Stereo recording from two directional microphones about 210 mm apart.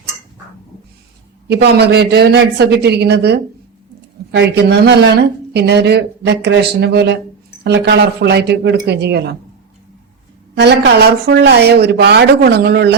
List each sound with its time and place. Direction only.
1.5 s speech: 50° right (ahead or behind)
10.6 s speech: 50° right (ahead or behind)